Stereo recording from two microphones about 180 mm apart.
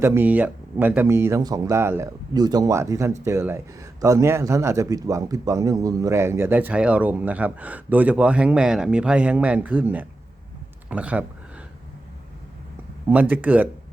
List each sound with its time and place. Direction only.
0.0 s speech: 10° right (ahead or behind)
13.1 s speech: 10° right (ahead or behind)